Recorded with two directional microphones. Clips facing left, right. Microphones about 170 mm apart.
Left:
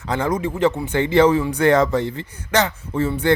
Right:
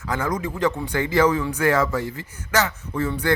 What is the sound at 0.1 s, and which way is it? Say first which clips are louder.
Speech: left 4 dB; 30° left (ahead or behind).